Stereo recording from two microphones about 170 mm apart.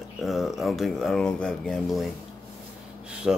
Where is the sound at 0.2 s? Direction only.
Centre (ahead or behind).